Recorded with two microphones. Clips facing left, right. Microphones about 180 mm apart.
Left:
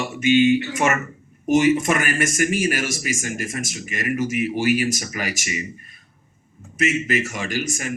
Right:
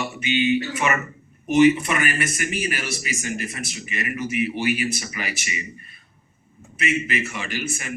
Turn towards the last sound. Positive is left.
turn(degrees=40)  # may be behind; listen again after turning